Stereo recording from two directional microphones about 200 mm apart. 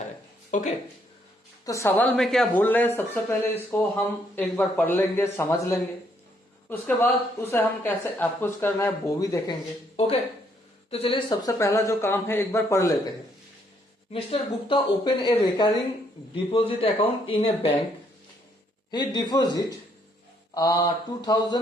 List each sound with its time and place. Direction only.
0.5 s speech: 40° left (ahead or behind)
1.6 s speech: 15° left (ahead or behind)
10.9 s speech: 25° left (ahead or behind)
14.1 s speech: 30° left (ahead or behind)
18.9 s speech: 20° left (ahead or behind)